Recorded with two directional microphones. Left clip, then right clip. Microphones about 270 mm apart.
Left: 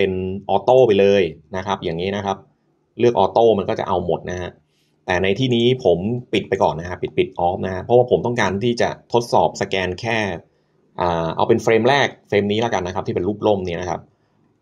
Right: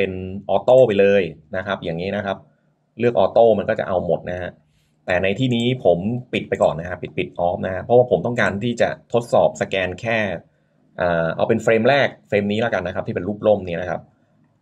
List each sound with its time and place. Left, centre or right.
0.0 s speech: centre